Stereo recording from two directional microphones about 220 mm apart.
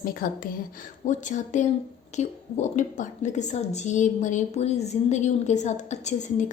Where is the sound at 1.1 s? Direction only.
35° left (ahead or behind).